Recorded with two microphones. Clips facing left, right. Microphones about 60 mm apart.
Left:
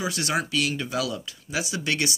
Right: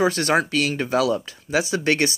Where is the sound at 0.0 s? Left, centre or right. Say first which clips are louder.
Right 8 dB; right.